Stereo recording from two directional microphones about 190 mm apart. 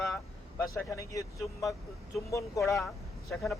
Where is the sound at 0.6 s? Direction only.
15° left (ahead or behind).